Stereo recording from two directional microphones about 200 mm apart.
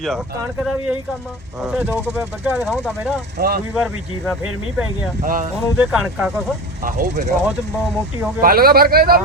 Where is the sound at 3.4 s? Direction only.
50° right (ahead or behind).